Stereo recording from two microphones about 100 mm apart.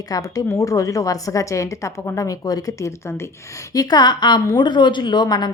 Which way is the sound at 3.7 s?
40° left (ahead or behind).